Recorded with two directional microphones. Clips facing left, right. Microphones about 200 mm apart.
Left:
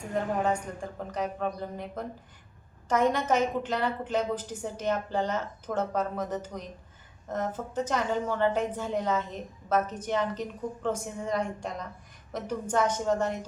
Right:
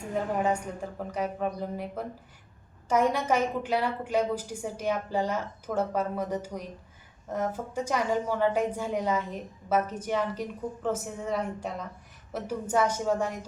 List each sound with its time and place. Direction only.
0.1 s a woman's voice: 10° right (ahead or behind)